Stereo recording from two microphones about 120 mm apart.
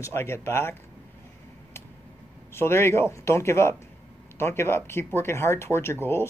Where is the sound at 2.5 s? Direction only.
20° left (ahead or behind).